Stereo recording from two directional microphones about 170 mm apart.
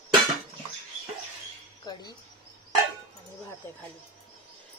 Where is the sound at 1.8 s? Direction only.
25° left (ahead or behind).